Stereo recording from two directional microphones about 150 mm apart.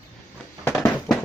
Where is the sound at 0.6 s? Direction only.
15° left (ahead or behind).